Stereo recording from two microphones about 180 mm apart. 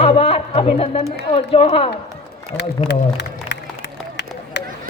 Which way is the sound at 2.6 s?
75° left (ahead or behind).